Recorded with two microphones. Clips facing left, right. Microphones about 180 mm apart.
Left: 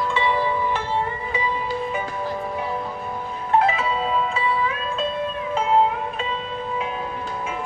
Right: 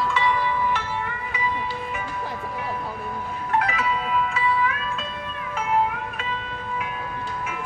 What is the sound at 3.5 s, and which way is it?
Music, 25° left (ahead or behind).